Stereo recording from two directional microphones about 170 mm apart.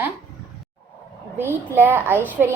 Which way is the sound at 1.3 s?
15° right (ahead or behind).